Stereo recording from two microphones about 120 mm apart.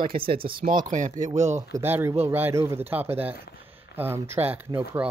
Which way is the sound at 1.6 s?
25° right (ahead or behind).